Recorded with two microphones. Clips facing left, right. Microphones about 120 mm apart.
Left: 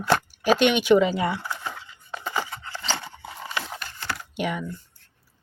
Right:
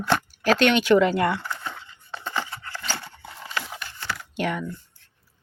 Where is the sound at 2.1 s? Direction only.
10° left (ahead or behind).